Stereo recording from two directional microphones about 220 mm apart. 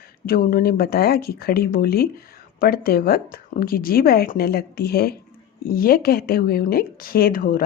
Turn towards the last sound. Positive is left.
turn(degrees=40)  # may be behind; listen again after turning